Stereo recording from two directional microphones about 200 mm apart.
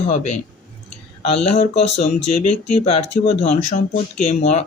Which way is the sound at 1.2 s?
30° left (ahead or behind).